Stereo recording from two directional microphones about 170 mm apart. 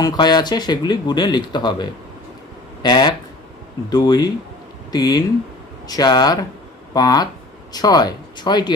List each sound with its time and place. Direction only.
0.0 s speech: 25° left (ahead or behind)